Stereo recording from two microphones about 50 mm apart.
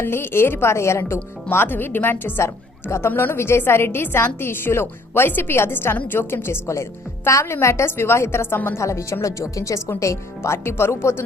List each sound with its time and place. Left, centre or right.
0.0 s a woman's voice: left
1.5 s a woman's voice: left
2.4 s a woman's voice: left
3.1 s a woman's voice: left
3.3 s a woman's voice: left
7.3 s a woman's voice: left
7.9 s a woman's voice: left
8.8 s speech: left
10.0 s speech: left
10.6 s a woman's voice: left